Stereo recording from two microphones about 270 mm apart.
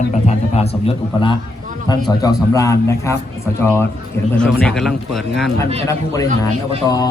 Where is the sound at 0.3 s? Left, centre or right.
Left.